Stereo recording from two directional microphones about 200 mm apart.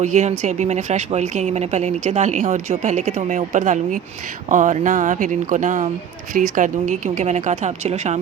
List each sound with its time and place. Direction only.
0.0 s speech: 35° right (ahead or behind)